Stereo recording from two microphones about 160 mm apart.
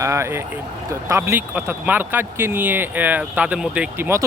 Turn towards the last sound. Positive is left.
turn(degrees=-15)  # may be behind; listen again after turning